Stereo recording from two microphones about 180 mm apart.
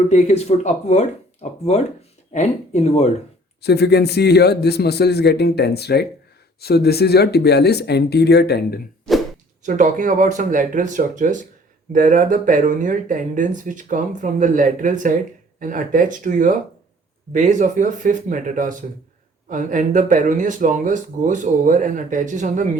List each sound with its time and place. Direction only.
0.1 s speech: 35° left (ahead or behind)
3.6 s a man's voice: 65° left (ahead or behind)
9.1 s a sound: 5° left (ahead or behind)
9.6 s speech: 45° right (ahead or behind)